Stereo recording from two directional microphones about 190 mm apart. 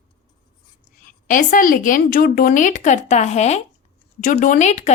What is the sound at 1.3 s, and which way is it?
Speech, 45° left (ahead or behind).